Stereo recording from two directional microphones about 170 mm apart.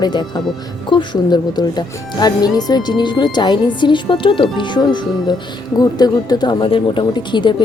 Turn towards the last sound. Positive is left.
turn(degrees=30)  # may be behind; listen again after turning